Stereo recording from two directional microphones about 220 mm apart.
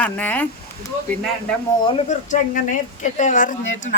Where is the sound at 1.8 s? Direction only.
30° left (ahead or behind).